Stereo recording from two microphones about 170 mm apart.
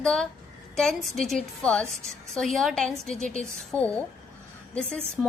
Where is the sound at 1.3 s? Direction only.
5° left (ahead or behind).